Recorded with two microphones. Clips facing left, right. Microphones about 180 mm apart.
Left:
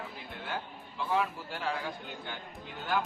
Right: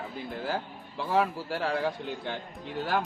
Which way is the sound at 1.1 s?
40° right (ahead or behind).